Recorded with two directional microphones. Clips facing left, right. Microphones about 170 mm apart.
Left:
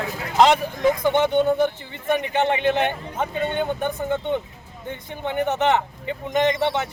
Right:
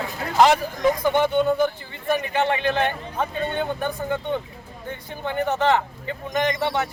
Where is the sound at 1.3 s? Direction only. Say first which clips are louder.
Left 1 dB; 20° left (ahead or behind).